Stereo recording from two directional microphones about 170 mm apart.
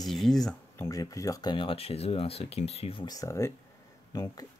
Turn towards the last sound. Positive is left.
turn(degrees=20)  # may be behind; listen again after turning